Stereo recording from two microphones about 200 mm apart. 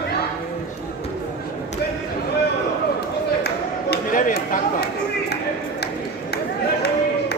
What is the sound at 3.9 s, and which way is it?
Chatter, 45° left (ahead or behind).